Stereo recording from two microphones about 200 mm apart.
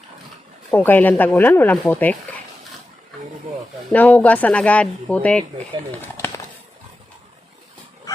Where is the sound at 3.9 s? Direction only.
10° left (ahead or behind).